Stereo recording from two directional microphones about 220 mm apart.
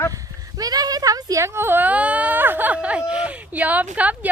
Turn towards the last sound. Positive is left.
turn(degrees=-5)  # may be behind; listen again after turning